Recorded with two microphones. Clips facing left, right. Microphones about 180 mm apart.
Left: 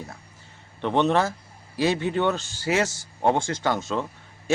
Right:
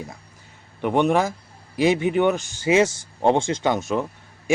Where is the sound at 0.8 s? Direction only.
10° right (ahead or behind).